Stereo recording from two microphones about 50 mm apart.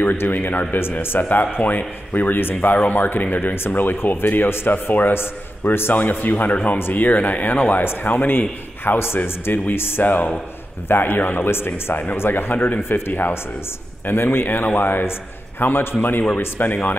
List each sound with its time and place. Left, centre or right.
0.2 s a man's voice: left
5.9 s a man's voice: left
12.5 s speech: left
12.8 s a man's voice: left